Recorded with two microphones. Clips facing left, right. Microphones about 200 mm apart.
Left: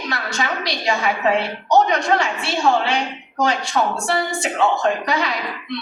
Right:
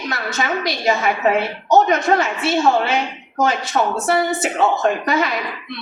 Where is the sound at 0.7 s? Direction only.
Centre (ahead or behind).